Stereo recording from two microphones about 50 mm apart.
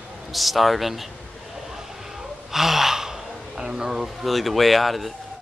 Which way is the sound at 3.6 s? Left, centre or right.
Centre.